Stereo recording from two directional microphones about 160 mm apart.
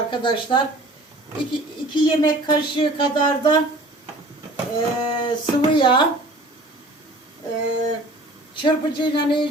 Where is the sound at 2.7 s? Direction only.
30° left (ahead or behind).